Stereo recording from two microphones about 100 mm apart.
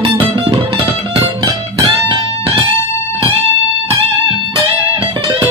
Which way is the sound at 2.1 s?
65° right (ahead or behind).